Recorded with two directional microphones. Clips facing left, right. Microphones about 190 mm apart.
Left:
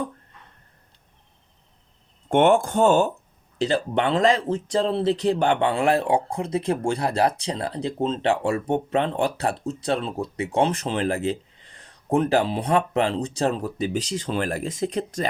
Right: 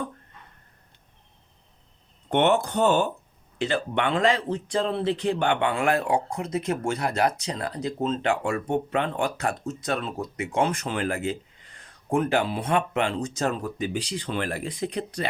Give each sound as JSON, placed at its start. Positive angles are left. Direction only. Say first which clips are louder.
{"t": 2.3, "sound": "speech", "louder": "left 4 dB", "side_deg": 50}